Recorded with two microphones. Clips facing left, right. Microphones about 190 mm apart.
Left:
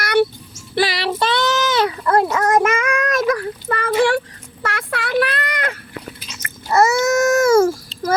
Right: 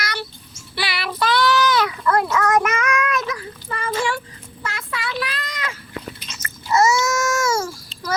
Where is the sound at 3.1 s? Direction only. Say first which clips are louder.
Left 7 dB; 50° left (ahead or behind).